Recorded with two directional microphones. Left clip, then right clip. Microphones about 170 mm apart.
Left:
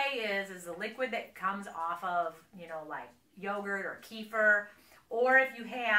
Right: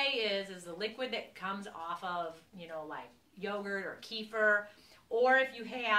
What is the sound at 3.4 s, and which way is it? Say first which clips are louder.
Speech: left 2 dB; 35° right (ahead or behind).